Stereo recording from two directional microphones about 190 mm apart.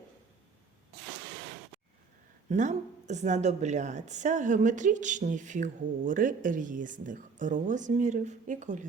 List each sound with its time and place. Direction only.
2.5 s a woman's voice: 40° right (ahead or behind)